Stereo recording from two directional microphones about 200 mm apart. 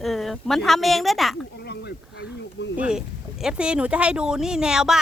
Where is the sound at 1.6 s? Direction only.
55° left (ahead or behind).